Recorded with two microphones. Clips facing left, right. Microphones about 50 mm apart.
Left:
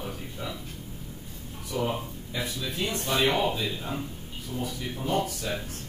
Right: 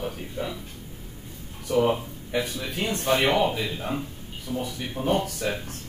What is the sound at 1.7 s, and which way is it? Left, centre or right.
Speech, right.